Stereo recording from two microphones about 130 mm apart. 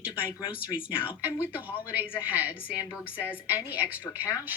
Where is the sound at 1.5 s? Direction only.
10° right (ahead or behind).